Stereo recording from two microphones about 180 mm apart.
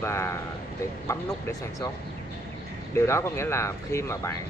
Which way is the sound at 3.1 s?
15° left (ahead or behind).